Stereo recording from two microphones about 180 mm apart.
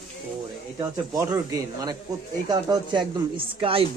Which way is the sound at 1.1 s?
15° right (ahead or behind).